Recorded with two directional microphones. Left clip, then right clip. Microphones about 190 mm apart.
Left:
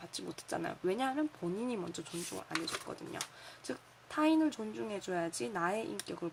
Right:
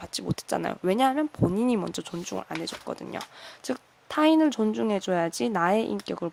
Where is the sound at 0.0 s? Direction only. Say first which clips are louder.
Right 11 dB; 45° right (ahead or behind).